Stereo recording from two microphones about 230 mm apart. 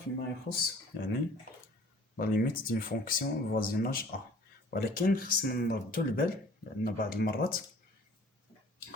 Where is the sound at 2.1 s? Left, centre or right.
Left.